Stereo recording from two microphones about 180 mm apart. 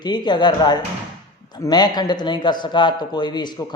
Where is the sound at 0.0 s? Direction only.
25° left (ahead or behind).